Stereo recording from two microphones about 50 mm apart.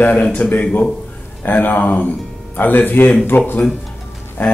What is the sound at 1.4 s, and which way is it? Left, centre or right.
Speech, left.